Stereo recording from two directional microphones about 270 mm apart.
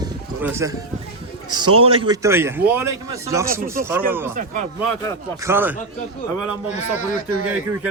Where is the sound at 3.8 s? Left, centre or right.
Centre.